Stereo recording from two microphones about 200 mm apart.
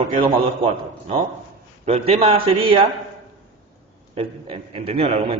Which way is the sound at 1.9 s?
30° right (ahead or behind).